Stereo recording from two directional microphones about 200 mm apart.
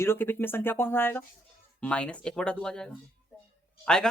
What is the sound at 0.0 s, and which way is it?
Speech, 10° left (ahead or behind).